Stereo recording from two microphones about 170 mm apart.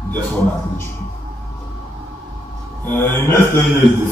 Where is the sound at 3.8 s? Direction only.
30° right (ahead or behind).